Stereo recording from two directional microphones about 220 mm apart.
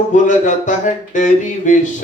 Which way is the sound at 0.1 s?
35° left (ahead or behind).